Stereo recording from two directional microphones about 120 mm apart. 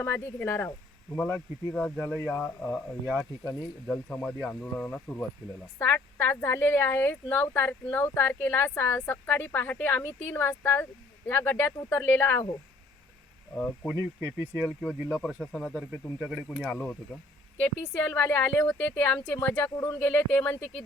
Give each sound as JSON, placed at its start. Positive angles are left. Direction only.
{"t": 0.0, "sound": "speech", "side_deg": 20}
{"t": 3.8, "sound": "speech", "side_deg": 10}
{"t": 13.9, "sound": "speech", "side_deg": -25}
{"t": 14.7, "sound": "speech", "side_deg": -5}
{"t": 15.9, "sound": "speech", "side_deg": -10}
{"t": 16.7, "sound": "speech", "side_deg": 15}